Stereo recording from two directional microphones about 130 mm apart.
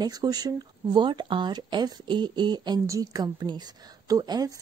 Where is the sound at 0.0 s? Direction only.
30° right (ahead or behind).